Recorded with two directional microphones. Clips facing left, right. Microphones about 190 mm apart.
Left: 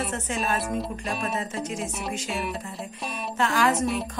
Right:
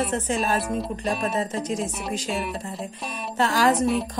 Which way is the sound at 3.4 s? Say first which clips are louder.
Right 3 dB; 35° right (ahead or behind).